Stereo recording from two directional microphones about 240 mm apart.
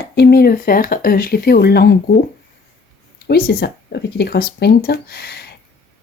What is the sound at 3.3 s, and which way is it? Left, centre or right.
Speech, left.